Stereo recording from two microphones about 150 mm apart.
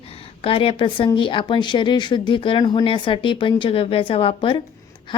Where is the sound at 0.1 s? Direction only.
40° left (ahead or behind).